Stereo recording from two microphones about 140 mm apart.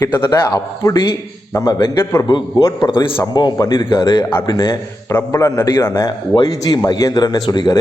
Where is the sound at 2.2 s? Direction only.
30° left (ahead or behind).